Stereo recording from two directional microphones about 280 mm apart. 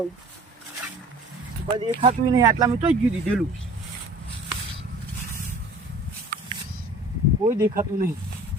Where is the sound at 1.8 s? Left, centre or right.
Centre.